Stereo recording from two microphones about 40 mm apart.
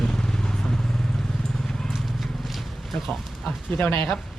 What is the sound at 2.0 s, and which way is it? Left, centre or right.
Horse, centre.